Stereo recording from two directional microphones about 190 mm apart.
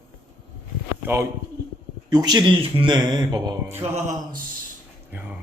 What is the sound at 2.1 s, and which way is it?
Speech, 20° right (ahead or behind).